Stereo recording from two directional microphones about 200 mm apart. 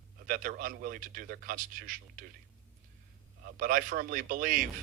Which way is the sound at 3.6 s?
45° right (ahead or behind).